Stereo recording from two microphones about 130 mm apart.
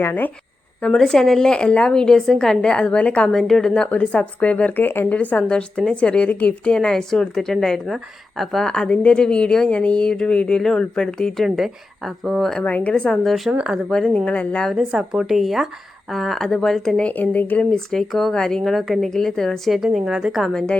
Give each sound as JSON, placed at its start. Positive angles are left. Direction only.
{"t": 0.0, "sound": "a woman's voice", "side_deg": 15}
{"t": 0.8, "sound": "a woman's voice", "side_deg": 5}
{"t": 13.9, "sound": "speech", "side_deg": 5}